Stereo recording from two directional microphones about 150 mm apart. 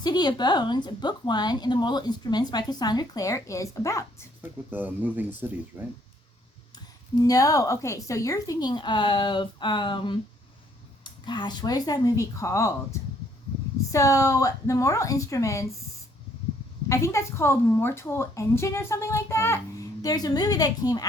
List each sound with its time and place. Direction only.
0.0 s a woman's voice: 30° left (ahead or behind)
4.7 s speech: 10° right (ahead or behind)
6.7 s a woman's voice: 25° left (ahead or behind)
16.9 s a woman's voice: 20° left (ahead or behind)